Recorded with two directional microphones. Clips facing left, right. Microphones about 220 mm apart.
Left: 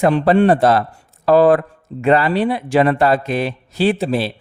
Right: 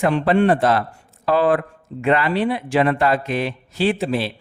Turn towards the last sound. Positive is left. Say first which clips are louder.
# left 3 dB
turn(degrees=35)  # may be behind; listen again after turning